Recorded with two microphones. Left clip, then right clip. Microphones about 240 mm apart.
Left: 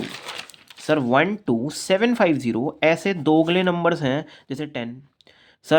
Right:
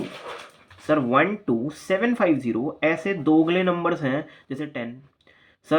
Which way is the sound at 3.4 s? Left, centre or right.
Left.